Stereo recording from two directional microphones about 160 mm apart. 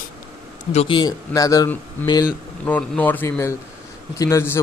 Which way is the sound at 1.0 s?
25° left (ahead or behind).